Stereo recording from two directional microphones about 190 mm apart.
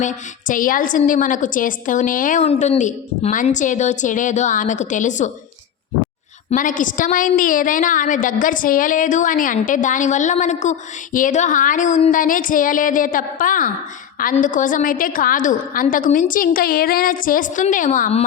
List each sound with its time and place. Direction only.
0.0 s a woman's voice: 40° left (ahead or behind)
6.5 s a woman's voice: 45° left (ahead or behind)